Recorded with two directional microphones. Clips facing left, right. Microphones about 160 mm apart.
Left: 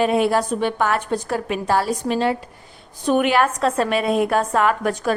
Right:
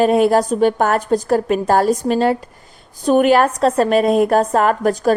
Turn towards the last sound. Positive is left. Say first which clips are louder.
# right 5 dB
turn(degrees=-40)  # may be behind; listen again after turning